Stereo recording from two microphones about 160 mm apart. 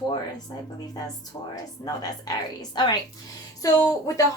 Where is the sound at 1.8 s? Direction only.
25° left (ahead or behind).